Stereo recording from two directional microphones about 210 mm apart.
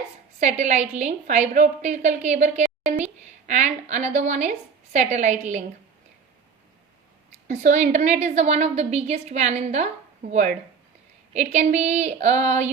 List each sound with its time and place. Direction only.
0.3 s a woman's voice: 35° right (ahead or behind)
7.4 s a woman's voice: 35° right (ahead or behind)